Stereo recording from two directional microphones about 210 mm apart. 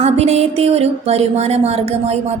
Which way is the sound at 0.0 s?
30° right (ahead or behind).